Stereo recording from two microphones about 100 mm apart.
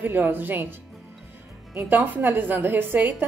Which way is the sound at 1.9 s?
20° right (ahead or behind).